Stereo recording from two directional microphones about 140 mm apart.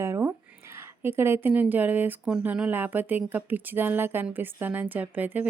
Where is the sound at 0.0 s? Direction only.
20° right (ahead or behind).